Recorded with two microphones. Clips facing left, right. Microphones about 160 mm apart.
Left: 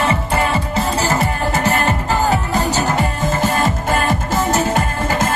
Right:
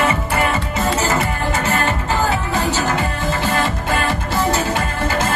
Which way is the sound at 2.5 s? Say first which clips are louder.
Left 2 dB; 40° left (ahead or behind).